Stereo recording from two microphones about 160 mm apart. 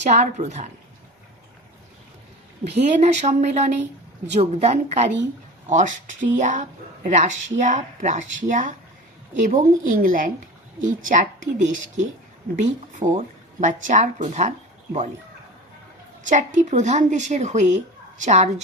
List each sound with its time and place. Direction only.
0.0 s speech: 50° right (ahead or behind)
2.6 s a woman's voice: 50° right (ahead or behind)
16.2 s speech: 50° right (ahead or behind)